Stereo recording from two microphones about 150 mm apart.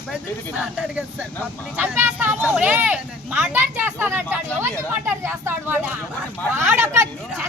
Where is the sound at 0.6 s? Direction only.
5° right (ahead or behind).